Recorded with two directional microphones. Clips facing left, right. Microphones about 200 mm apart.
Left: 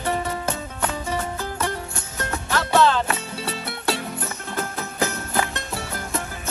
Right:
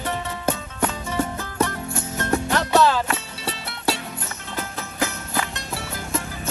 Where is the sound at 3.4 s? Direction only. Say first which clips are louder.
Even; 55° left (ahead or behind).